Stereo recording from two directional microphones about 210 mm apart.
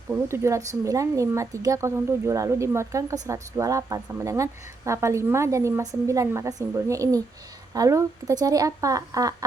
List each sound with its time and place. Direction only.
0.1 s speech: 15° right (ahead or behind)